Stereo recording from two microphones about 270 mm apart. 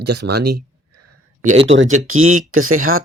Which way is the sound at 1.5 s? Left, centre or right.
Right.